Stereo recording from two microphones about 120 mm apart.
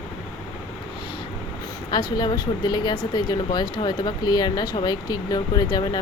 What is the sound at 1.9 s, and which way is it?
Speech, 40° left (ahead or behind).